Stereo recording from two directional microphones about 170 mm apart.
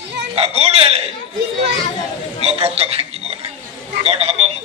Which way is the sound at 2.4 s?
35° right (ahead or behind).